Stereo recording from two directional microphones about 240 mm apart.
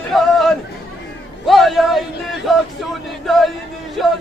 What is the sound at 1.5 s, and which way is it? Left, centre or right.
Speech, centre.